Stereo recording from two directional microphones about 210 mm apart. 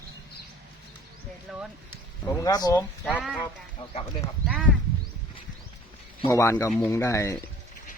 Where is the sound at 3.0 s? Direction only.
Centre (ahead or behind).